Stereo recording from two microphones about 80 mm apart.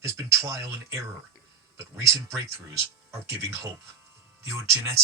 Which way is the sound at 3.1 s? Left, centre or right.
Right.